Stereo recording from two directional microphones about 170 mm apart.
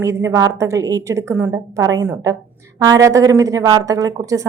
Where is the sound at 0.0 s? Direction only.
15° right (ahead or behind).